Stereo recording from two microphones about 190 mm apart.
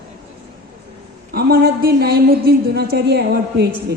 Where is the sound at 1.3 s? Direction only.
55° right (ahead or behind).